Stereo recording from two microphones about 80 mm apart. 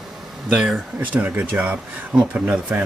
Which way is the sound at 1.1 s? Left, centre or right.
Right.